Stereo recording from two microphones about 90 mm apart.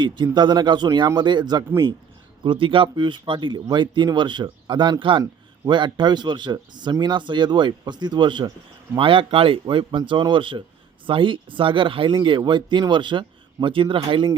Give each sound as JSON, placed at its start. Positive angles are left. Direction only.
{"t": 0.0, "sound": "speech", "side_deg": -60}
{"t": 2.4, "sound": "speech", "side_deg": -70}
{"t": 9.0, "sound": "speech", "side_deg": -75}
{"t": 10.1, "sound": "speech", "side_deg": -65}